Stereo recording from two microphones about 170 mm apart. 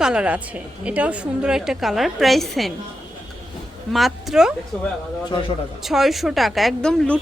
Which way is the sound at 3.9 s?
Centre (ahead or behind).